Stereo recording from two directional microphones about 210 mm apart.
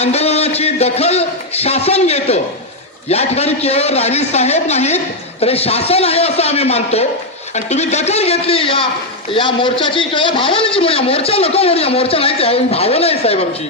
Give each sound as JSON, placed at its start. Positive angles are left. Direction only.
{"t": 0.0, "sound": "a man's voice", "side_deg": 30}